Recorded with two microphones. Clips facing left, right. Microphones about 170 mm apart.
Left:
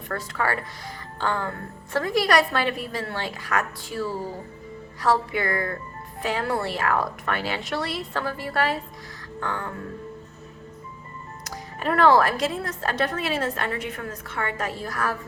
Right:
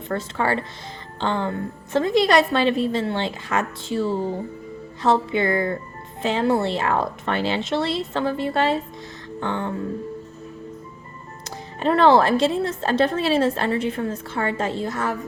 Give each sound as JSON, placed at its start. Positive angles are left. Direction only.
{"t": 0.1, "sound": "a woman's voice", "side_deg": -25}
{"t": 11.4, "sound": "a woman's voice", "side_deg": -25}